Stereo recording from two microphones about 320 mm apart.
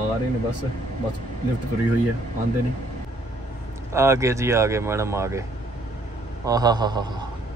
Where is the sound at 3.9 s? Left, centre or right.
Centre.